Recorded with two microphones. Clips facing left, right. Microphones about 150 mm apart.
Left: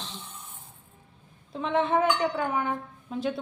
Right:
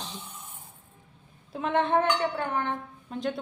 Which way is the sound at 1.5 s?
5° right (ahead or behind).